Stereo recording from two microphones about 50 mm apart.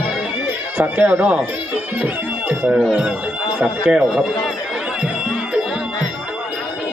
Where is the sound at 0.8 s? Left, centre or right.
Right.